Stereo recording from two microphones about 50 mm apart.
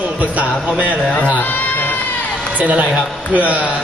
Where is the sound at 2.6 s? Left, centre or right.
Right.